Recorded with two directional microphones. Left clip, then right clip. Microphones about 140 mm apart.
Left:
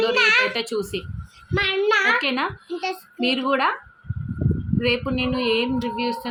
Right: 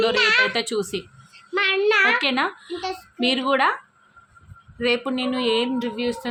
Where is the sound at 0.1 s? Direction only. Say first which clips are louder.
Left 1 dB; 15° left (ahead or behind).